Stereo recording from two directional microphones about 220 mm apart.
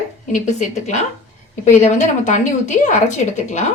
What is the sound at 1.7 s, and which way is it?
Speech, 35° left (ahead or behind).